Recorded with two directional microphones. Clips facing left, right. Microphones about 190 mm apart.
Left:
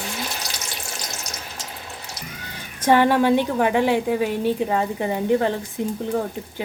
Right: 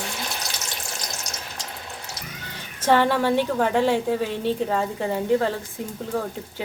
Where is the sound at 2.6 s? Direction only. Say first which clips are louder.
Left 2 dB; 15° left (ahead or behind).